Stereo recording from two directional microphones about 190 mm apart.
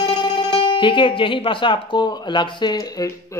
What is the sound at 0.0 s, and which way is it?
A man's voice, 25° left (ahead or behind).